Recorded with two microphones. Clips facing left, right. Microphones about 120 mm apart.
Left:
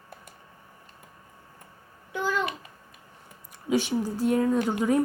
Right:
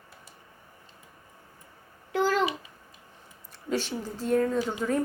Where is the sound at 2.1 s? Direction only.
90° right.